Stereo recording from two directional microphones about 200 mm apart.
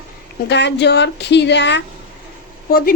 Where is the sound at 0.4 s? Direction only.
60° left (ahead or behind).